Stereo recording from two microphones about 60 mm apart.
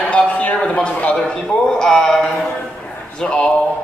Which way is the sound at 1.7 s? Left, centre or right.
Centre.